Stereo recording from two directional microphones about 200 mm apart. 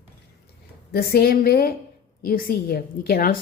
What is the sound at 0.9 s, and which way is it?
A woman's voice, 50° left (ahead or behind).